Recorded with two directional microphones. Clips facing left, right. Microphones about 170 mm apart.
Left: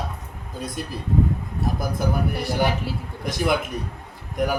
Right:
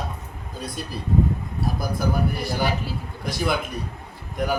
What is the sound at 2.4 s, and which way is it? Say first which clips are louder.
Speech: left 2 dB; 70° left (ahead or behind).